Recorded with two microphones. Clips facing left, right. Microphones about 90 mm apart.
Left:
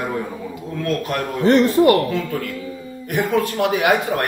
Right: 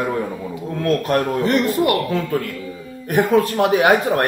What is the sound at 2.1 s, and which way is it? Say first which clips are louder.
A man's voice: right 2 dB; 35° right (ahead or behind).